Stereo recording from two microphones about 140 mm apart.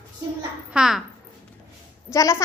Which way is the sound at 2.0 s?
20° left (ahead or behind).